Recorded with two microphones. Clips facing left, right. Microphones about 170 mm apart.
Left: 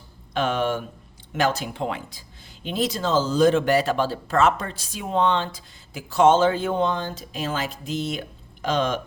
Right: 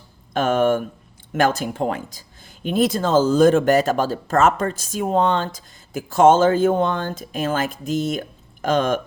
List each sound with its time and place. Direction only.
0.3 s speech: 45° right (ahead or behind)